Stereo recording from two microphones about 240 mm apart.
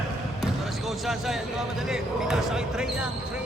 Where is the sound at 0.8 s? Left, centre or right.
Centre.